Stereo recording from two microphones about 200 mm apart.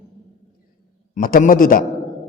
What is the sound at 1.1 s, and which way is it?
Speech, 45° left (ahead or behind).